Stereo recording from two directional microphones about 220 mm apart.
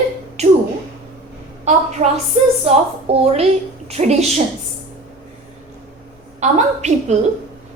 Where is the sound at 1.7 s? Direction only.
30° right (ahead or behind).